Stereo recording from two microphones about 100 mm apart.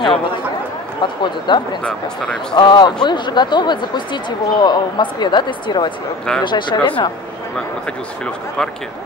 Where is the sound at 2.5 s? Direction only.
50° left (ahead or behind).